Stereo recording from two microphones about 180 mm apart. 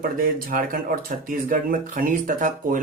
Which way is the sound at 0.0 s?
50° right (ahead or behind).